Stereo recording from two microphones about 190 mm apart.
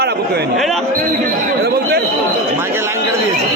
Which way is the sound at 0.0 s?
60° right (ahead or behind).